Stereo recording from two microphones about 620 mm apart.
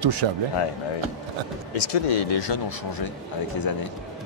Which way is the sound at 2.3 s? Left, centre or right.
Left.